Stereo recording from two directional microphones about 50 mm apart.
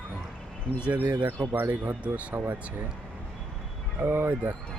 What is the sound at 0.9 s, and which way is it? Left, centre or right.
Speech, right.